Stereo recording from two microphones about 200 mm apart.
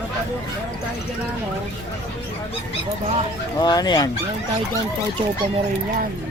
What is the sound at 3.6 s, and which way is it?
Speech, 20° left (ahead or behind).